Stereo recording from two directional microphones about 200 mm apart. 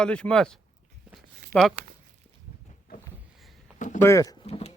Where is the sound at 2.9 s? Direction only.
50° left (ahead or behind).